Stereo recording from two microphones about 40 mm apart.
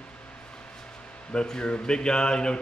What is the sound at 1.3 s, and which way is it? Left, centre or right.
Speech, left.